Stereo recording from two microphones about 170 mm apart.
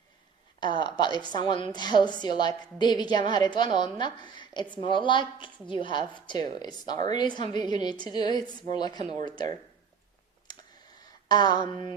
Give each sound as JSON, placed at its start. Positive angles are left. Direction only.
{"t": 0.6, "sound": "a woman's voice", "side_deg": 25}
{"t": 11.3, "sound": "a woman's voice", "side_deg": 25}